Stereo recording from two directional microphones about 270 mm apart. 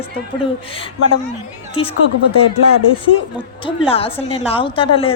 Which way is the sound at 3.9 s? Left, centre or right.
Left.